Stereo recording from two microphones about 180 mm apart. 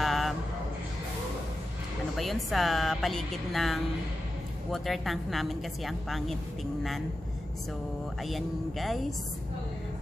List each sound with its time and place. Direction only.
0.0 s music: centre (ahead or behind)
2.1 s speech: centre (ahead or behind)
8.2 s speech: centre (ahead or behind)